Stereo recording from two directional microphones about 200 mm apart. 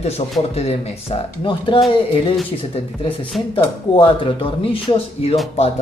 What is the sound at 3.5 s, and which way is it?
Speech, 25° left (ahead or behind).